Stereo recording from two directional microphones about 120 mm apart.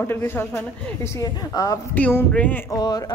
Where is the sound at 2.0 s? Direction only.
15° left (ahead or behind).